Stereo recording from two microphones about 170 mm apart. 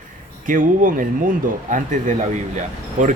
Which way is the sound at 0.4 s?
50° right (ahead or behind).